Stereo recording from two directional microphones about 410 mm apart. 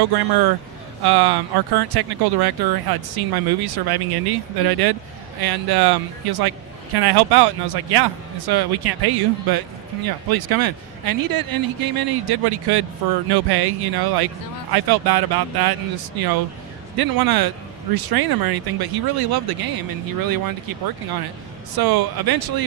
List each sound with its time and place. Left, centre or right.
0.0 s speech: right